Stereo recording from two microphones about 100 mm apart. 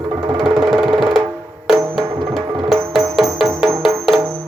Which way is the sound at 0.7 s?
5° right (ahead or behind).